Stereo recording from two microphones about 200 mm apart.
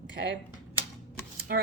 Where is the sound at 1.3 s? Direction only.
50° right (ahead or behind).